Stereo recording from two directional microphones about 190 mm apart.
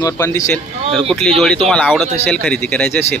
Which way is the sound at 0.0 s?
15° left (ahead or behind).